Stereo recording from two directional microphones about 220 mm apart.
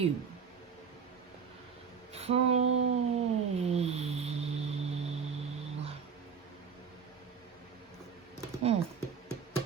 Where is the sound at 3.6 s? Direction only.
30° right (ahead or behind).